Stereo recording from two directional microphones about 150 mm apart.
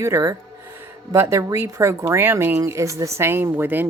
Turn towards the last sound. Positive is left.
turn(degrees=-10)  # may be behind; listen again after turning